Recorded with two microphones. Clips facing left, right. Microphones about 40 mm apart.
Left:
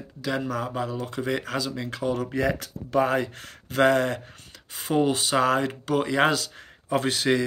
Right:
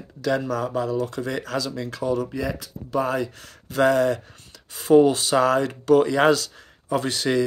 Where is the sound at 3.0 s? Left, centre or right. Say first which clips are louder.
Left 1 dB; left.